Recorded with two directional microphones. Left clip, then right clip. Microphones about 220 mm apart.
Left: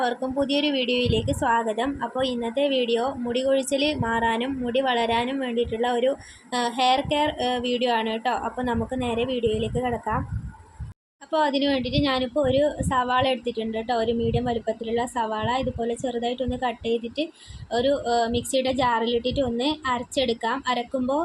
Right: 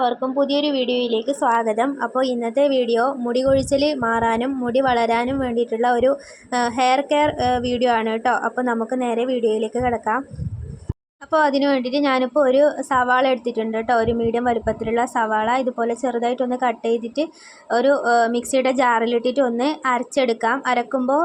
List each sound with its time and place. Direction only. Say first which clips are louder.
0.1 s a woman's voice: right 5 dB; centre (ahead or behind)
11.3 s a woman's voice: right 5 dB; 15° right (ahead or behind)